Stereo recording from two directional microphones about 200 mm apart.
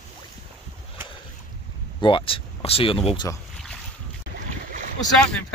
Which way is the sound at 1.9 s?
25° left (ahead or behind).